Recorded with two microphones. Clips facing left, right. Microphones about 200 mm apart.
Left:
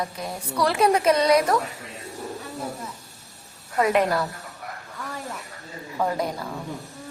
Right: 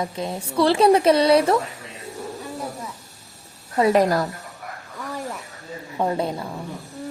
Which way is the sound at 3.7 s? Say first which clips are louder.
Right 3 dB; 35° right (ahead or behind).